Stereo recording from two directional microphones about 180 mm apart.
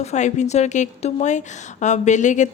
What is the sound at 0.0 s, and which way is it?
Speech, 40° left (ahead or behind).